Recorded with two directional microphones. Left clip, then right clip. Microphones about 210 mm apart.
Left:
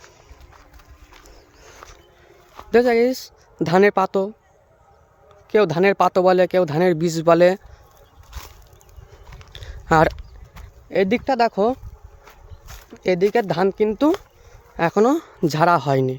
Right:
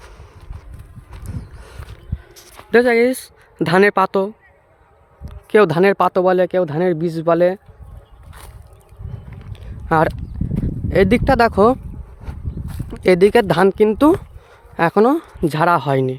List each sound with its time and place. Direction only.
2.6 s speech: 10° right (ahead or behind)
5.5 s speech: 25° right (ahead or behind); by 7.6 s centre (ahead or behind)
9.5 s a sound: centre (ahead or behind)
10.8 s speech: 25° right (ahead or behind)
12.9 s speech: 35° right (ahead or behind); by 16.1 s 5° right (ahead or behind)